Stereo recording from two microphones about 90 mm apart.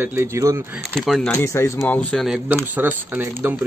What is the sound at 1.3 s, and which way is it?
Speech, 30° left (ahead or behind).